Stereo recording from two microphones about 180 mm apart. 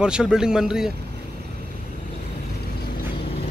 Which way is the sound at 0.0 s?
5° right (ahead or behind).